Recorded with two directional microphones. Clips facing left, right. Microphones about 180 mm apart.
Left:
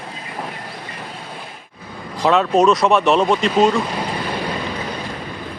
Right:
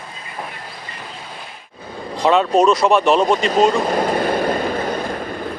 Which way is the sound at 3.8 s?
45° right (ahead or behind).